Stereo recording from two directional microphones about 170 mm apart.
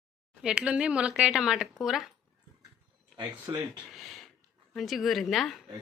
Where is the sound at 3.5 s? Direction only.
20° right (ahead or behind).